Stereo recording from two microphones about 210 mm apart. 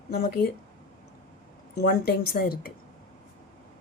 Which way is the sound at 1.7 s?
45° left (ahead or behind).